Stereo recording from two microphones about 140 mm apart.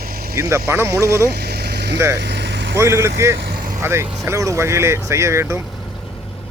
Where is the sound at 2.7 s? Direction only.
20° right (ahead or behind).